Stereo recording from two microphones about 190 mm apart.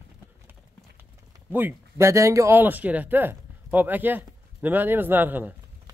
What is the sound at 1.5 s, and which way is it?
Speech, 10° right (ahead or behind).